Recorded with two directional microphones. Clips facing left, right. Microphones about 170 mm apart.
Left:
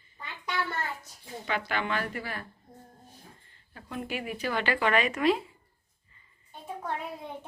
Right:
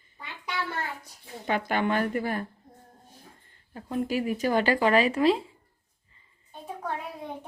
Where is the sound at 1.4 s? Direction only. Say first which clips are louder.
Right 5 dB; 50° right (ahead or behind).